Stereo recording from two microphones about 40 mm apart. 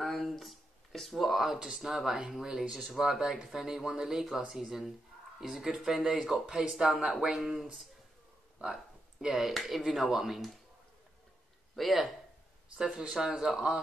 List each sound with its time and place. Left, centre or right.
0.0 s speech: centre
6.4 s speech: right
6.7 s speech: centre
9.5 s speech: centre
11.7 s speech: centre
12.7 s speech: centre